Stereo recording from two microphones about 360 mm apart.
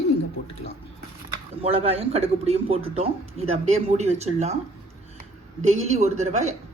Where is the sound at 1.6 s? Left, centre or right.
Centre.